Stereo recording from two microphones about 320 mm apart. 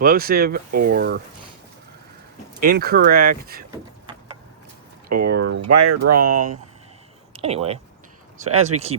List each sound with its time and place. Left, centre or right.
0.0 s speech: right
2.6 s speech: right
5.3 s speech: right
5.6 s speech: right
7.3 s speech: centre